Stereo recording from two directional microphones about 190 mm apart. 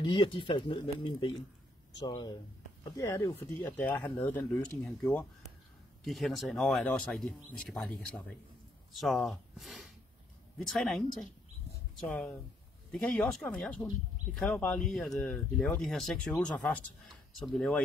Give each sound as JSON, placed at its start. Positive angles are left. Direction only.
{"t": 0.0, "sound": "speech", "side_deg": 25}